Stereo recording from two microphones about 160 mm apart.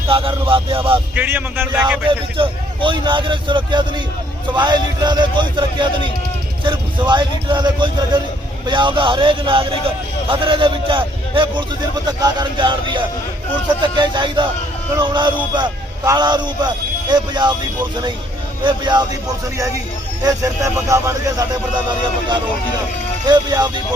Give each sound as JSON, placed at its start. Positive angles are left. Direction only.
{"t": 0.1, "sound": "a man's voice", "side_deg": -35}
{"t": 1.1, "sound": "speech", "side_deg": -10}
{"t": 2.0, "sound": "a man's voice", "side_deg": -30}
{"t": 18.6, "sound": "speech", "side_deg": -30}
{"t": 20.2, "sound": "speech", "side_deg": -20}
{"t": 23.2, "sound": "speech", "side_deg": -25}